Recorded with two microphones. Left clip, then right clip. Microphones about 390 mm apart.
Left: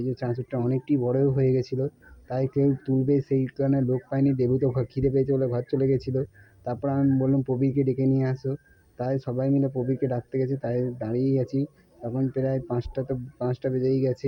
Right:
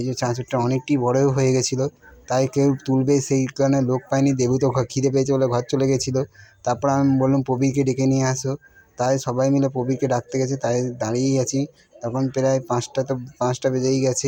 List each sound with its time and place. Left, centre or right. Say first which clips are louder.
0.0 s speech: right 5 dB; left